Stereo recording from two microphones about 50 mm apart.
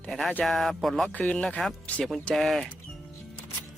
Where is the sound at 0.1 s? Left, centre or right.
Centre.